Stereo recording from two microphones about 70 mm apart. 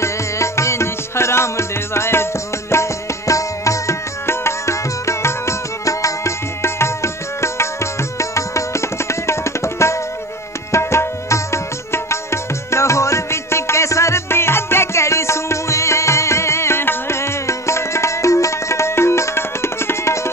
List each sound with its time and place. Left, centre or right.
0.0 s music: left